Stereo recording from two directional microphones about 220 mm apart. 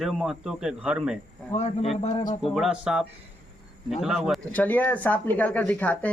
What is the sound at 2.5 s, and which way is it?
Speech, centre (ahead or behind).